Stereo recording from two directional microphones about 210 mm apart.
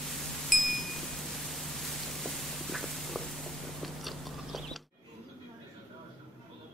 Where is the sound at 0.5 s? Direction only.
Centre (ahead or behind).